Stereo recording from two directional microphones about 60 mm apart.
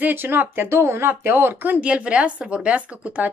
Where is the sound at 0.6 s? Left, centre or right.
Right.